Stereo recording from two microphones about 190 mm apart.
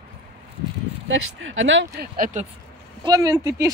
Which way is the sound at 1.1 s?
90° right.